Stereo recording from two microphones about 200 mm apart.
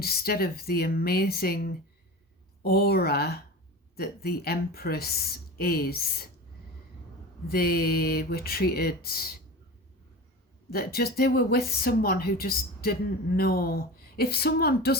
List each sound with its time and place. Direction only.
0.0 s speech: 50° left (ahead or behind)
7.4 s speech: 50° left (ahead or behind)
10.7 s speech: 50° left (ahead or behind)